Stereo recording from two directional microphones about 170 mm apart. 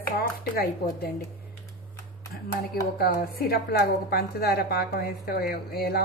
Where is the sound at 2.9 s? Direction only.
65° left (ahead or behind).